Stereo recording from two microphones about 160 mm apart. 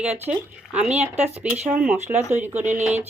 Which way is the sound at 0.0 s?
10° right (ahead or behind).